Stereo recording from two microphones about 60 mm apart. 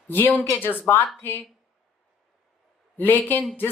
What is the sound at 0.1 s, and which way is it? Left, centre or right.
Speech, left.